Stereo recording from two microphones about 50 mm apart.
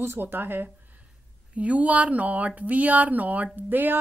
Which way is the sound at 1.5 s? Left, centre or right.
Right.